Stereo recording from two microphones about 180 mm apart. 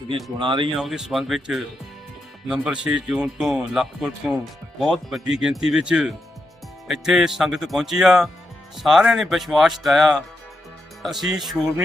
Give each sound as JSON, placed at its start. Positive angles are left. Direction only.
{"t": 0.3, "sound": "speech", "side_deg": -25}
{"t": 0.8, "sound": "speech", "side_deg": 0}